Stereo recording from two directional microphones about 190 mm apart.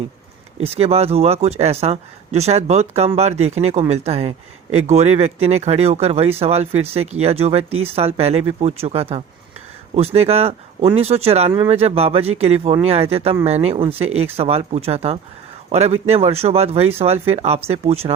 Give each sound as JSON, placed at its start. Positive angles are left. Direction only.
{"t": 0.6, "sound": "speech", "side_deg": -30}